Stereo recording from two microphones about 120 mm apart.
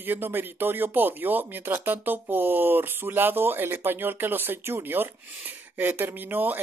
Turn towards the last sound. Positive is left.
turn(degrees=-15)  # may be behind; listen again after turning